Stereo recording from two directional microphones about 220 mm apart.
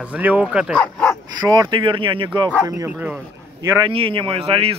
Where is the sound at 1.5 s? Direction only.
20° right (ahead or behind).